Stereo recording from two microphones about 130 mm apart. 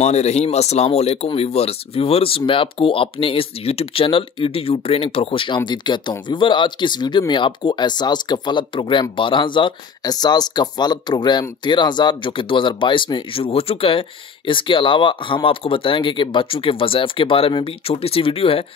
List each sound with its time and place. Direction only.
0.0 s speech: 55° left (ahead or behind)